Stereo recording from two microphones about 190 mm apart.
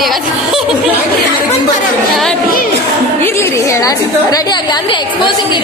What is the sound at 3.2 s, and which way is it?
A woman's voice, 15° left (ahead or behind).